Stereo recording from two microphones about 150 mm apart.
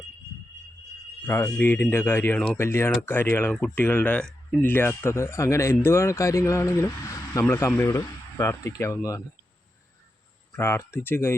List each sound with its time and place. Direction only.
1.2 s speech: 20° left (ahead or behind)
10.5 s speech: 15° left (ahead or behind)